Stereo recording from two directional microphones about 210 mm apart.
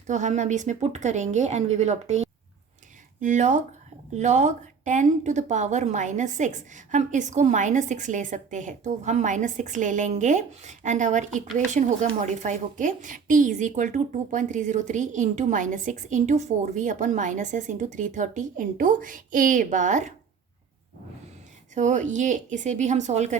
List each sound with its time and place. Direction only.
0.1 s a woman's voice: 35° right (ahead or behind)
21.8 s a woman's voice: 35° right (ahead or behind)